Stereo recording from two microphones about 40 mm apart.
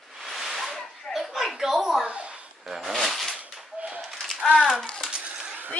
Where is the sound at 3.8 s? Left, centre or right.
Right.